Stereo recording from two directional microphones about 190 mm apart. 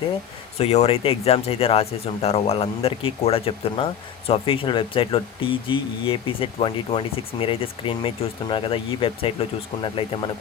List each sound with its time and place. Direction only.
0.6 s speech: 35° left (ahead or behind)